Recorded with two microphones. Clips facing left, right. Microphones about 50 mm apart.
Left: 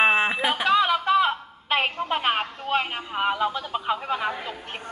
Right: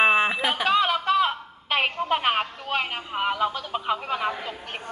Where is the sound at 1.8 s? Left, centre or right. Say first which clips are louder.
Right 4 dB; centre.